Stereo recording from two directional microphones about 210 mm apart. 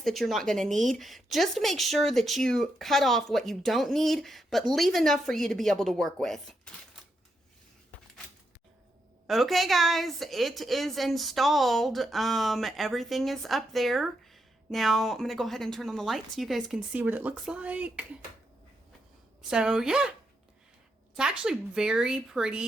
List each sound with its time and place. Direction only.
0.0 s a woman's voice: centre (ahead or behind)
9.2 s a woman's voice: centre (ahead or behind)
19.4 s a woman's voice: 5° right (ahead or behind)
21.2 s a woman's voice: 5° right (ahead or behind)